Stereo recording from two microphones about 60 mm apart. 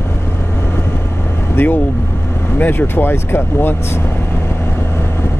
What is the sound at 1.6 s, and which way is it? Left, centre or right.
Speech, left.